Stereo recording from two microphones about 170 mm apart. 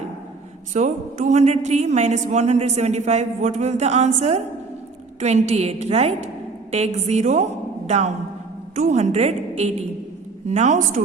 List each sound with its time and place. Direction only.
0.7 s a woman's voice: 45° right (ahead or behind)